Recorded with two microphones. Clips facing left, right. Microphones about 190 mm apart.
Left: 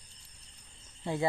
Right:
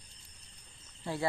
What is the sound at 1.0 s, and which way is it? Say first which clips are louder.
Speech: left 3 dB; 20° left (ahead or behind).